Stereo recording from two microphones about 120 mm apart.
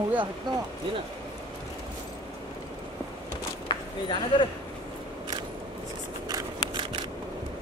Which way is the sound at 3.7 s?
40° left (ahead or behind).